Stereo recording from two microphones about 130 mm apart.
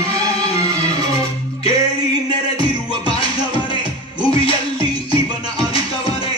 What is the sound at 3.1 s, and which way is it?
Music, 45° left (ahead or behind).